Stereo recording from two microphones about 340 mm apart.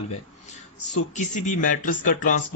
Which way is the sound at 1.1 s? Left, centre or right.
Left.